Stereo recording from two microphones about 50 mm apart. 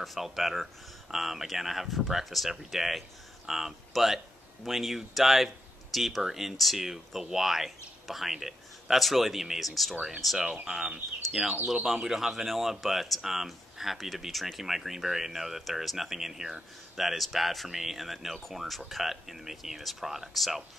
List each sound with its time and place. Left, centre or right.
0.0 s speech: centre
10.4 s speech: centre
11.6 s speech: centre